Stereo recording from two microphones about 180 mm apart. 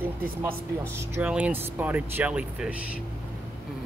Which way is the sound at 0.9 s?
10° right (ahead or behind).